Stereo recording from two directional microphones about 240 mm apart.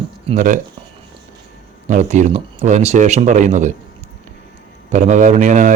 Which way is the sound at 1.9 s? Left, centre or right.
Right.